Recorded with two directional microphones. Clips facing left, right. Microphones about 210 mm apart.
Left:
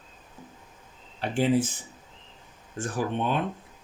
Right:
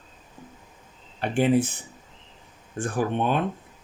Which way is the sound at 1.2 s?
60° right (ahead or behind).